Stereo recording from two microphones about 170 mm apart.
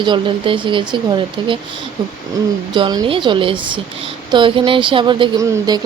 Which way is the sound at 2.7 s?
25° right (ahead or behind).